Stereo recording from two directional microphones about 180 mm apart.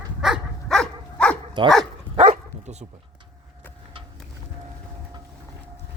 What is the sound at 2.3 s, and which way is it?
Dog, 40° right (ahead or behind).